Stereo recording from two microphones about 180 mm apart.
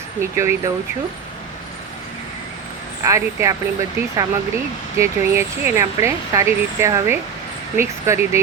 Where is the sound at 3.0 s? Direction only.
15° right (ahead or behind).